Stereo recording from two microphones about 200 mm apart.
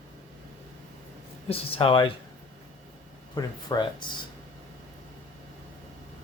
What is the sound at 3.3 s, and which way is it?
Speech, 20° left (ahead or behind).